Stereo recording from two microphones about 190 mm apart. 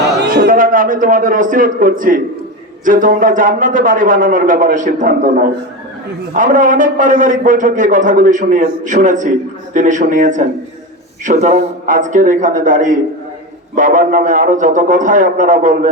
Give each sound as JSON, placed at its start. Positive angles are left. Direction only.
{"t": 0.3, "sound": "a man's voice", "side_deg": -50}